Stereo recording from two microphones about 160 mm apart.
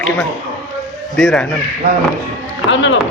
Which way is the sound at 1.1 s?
5° left (ahead or behind).